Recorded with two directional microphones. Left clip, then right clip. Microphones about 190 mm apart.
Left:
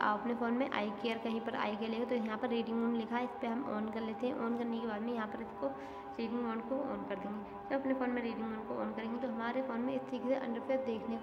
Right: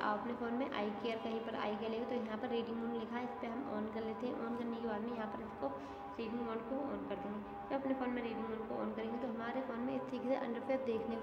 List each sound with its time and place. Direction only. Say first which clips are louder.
0.0 s a woman's voice: left 5 dB; 30° left (ahead or behind)
7.7 s a woman's voice: left 4 dB; 25° left (ahead or behind)